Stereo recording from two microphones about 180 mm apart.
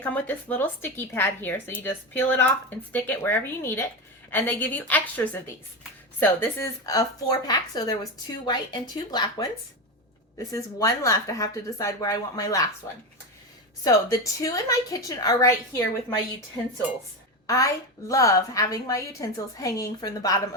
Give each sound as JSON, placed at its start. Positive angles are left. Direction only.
{"t": 0.0, "sound": "a woman's voice", "side_deg": 10}
{"t": 17.4, "sound": "a sound", "side_deg": 20}
{"t": 18.1, "sound": "a woman's voice", "side_deg": 20}